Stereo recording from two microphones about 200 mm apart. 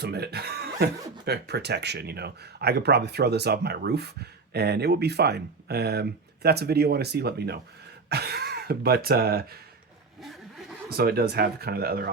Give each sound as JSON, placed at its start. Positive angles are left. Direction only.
{"t": 0.0, "sound": "speech", "side_deg": -55}
{"t": 10.8, "sound": "speech", "side_deg": -50}